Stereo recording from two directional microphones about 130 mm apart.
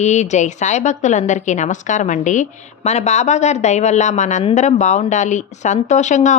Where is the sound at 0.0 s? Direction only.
60° left (ahead or behind).